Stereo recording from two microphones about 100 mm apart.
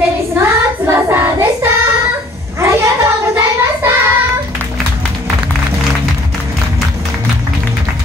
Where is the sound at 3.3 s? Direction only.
25° right (ahead or behind).